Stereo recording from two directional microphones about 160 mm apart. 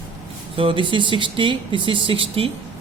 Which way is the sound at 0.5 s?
35° right (ahead or behind).